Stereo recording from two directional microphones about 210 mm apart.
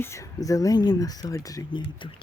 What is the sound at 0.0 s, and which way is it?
Speech, 15° left (ahead or behind).